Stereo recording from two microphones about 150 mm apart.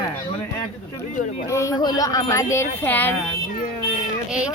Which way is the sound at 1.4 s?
20° left (ahead or behind).